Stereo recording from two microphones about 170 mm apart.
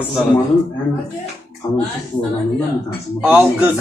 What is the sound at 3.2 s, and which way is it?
Speech, 10° right (ahead or behind).